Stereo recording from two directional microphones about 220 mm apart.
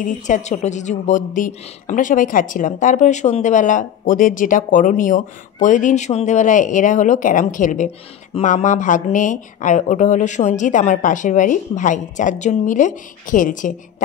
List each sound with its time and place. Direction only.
0.0 s a woman's voice: 35° left (ahead or behind)